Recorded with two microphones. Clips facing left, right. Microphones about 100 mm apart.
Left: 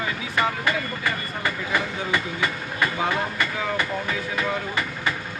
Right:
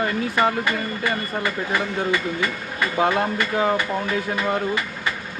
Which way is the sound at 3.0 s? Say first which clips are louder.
Right 5 dB; 55° right (ahead or behind).